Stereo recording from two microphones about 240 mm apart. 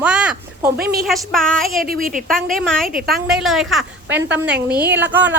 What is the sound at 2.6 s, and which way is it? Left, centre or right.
A woman's voice, centre.